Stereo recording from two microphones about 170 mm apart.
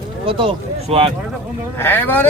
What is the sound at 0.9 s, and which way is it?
Speech, 35° right (ahead or behind).